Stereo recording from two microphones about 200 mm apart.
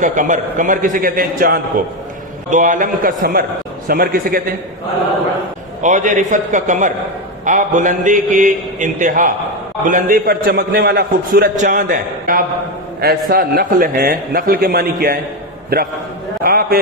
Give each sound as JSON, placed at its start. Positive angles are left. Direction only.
{"t": 0.0, "sound": "a man's voice", "side_deg": -40}
{"t": 5.8, "sound": "a man's voice", "side_deg": -40}